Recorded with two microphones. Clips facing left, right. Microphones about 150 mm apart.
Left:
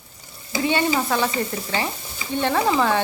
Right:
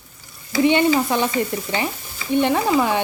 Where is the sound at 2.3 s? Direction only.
15° right (ahead or behind).